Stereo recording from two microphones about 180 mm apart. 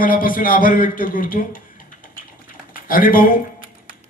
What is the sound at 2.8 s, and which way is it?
Speech, 50° left (ahead or behind).